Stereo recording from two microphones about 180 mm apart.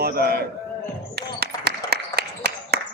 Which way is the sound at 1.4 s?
60° right (ahead or behind).